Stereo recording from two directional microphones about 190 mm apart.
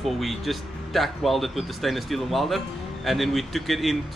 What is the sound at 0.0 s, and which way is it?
Speech, centre (ahead or behind).